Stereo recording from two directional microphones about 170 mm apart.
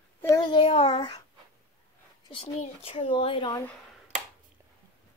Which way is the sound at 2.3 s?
35° left (ahead or behind).